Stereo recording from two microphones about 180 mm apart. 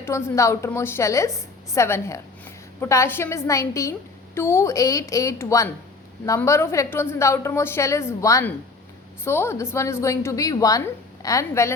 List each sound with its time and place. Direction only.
0.0 s a woman's voice: 15° left (ahead or behind)